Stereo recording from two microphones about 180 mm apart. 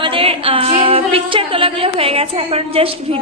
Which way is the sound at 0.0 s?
30° right (ahead or behind).